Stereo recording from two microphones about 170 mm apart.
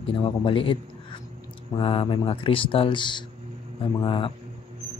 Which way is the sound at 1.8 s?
30° left (ahead or behind).